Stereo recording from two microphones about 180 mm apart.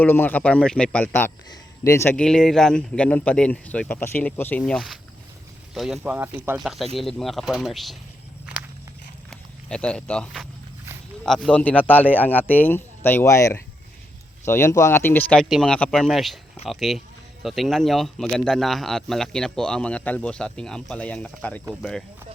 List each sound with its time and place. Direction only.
0.0 s speech: 10° left (ahead or behind); by 6.6 s 10° right (ahead or behind)
6.6 s speech: centre (ahead or behind)
9.3 s speech: 5° left (ahead or behind)